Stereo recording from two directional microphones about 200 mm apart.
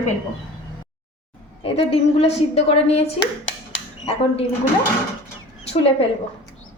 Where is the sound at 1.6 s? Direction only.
30° left (ahead or behind).